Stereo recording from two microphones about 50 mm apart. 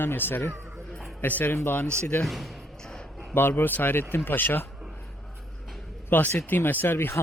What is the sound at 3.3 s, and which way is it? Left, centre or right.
Speech, left.